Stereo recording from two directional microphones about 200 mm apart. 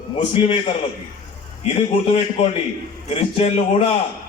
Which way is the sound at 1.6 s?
30° left (ahead or behind).